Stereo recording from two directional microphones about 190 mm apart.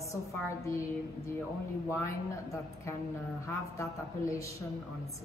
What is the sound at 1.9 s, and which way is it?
A woman's voice, 15° left (ahead or behind).